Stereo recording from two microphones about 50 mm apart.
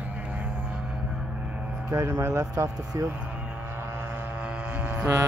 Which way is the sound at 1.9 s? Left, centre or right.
Right.